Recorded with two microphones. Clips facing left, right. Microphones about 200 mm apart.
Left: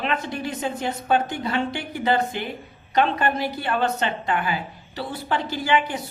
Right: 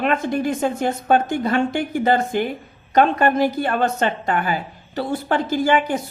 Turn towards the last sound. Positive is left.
turn(degrees=-45)  # may be behind; listen again after turning